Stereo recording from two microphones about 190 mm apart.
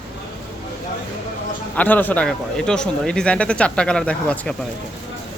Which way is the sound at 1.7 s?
10° left (ahead or behind).